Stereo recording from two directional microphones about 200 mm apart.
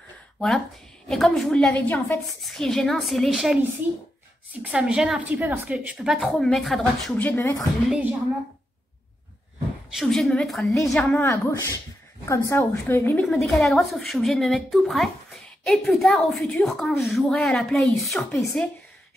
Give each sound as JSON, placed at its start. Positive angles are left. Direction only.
{"t": 1.0, "sound": "a woman's voice", "side_deg": 0}
{"t": 4.6, "sound": "a woman's voice", "side_deg": -5}
{"t": 7.9, "sound": "a woman's voice", "side_deg": -10}
{"t": 9.9, "sound": "a woman's voice", "side_deg": 0}